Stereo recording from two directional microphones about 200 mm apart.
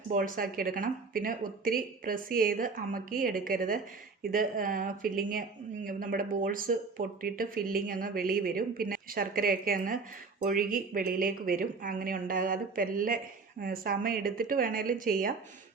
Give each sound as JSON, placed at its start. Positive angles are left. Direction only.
{"t": 0.1, "sound": "speech", "side_deg": -45}